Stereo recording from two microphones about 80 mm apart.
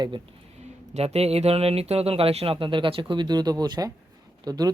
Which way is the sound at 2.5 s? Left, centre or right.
Right.